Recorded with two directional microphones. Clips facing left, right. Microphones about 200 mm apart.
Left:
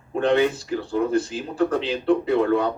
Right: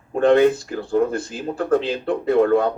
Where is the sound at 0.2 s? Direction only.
45° right (ahead or behind).